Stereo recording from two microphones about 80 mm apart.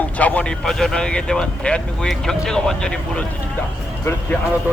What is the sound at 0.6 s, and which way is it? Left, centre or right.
Speech, centre.